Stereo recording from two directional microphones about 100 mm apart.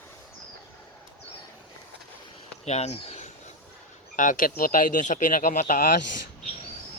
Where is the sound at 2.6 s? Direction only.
90° left.